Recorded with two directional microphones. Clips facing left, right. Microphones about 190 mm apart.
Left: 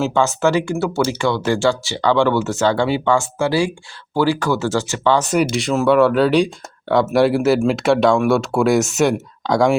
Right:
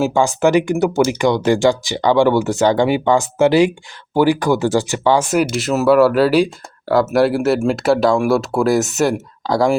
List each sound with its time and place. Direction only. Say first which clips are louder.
0.0 s speech: right 2 dB; 15° right (ahead or behind)